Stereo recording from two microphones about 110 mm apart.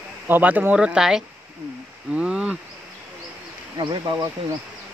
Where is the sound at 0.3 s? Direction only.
15° right (ahead or behind).